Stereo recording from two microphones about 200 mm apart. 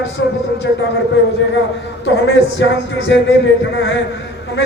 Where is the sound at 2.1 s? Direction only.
60° left (ahead or behind).